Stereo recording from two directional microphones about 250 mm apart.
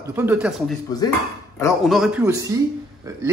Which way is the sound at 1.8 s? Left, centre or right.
Centre.